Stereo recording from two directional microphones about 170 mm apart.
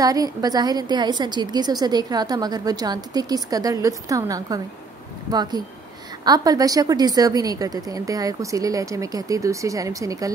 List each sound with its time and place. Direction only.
0.0 s a woman's voice: 20° right (ahead or behind)